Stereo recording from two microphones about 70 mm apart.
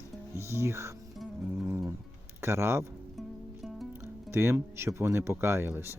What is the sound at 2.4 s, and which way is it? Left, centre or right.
Speech, right.